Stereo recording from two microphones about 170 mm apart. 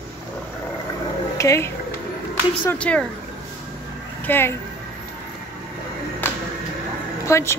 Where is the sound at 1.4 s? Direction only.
15° left (ahead or behind).